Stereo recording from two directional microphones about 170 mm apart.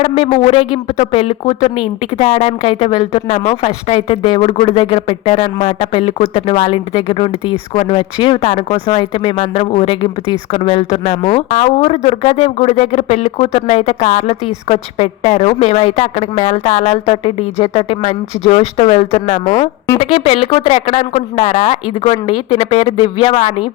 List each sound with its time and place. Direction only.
0.0 s speech: 35° left (ahead or behind)
22.0 s speech: 30° left (ahead or behind)